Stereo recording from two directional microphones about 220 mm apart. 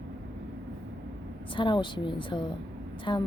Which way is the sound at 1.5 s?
20° left (ahead or behind).